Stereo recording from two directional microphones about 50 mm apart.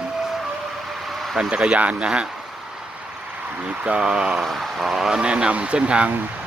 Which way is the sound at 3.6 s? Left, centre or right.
Right.